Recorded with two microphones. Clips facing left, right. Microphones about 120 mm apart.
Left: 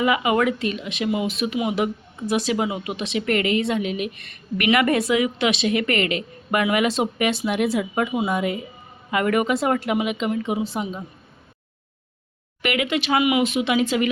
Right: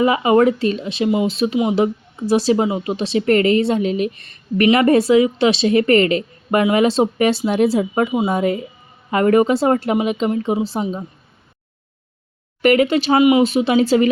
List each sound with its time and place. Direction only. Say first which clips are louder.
0.0 s speech: right 6 dB; 35° right (ahead or behind)
12.6 s speech: right 9 dB; 40° right (ahead or behind)